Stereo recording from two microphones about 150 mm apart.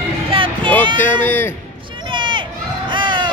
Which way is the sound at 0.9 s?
10° left (ahead or behind).